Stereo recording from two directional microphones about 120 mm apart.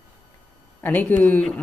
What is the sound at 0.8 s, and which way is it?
Speech, 15° left (ahead or behind).